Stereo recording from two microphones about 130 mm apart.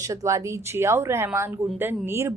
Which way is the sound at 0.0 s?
25° right (ahead or behind).